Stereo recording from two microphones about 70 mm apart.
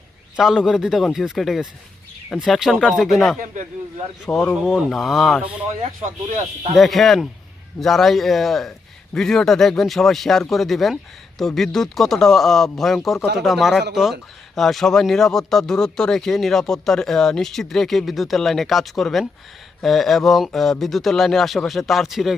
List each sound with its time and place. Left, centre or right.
0.3 s speech: centre
4.3 s speech: left
4.6 s speech: centre
6.7 s speech: centre